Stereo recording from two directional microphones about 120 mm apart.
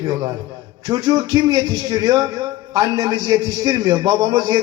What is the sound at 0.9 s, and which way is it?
A man's voice, 30° right (ahead or behind).